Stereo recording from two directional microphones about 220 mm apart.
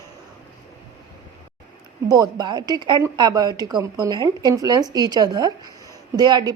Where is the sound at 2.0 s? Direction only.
15° right (ahead or behind).